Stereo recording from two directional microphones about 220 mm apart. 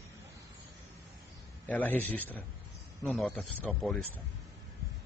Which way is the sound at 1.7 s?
5° left (ahead or behind).